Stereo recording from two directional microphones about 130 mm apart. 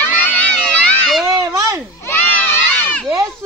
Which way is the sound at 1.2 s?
25° right (ahead or behind).